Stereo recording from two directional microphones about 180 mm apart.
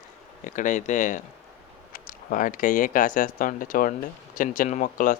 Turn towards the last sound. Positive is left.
turn(degrees=45)  # may be behind; listen again after turning